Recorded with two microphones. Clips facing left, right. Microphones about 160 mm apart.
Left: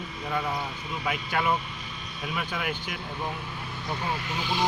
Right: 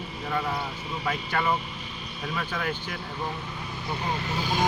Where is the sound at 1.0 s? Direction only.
5° left (ahead or behind).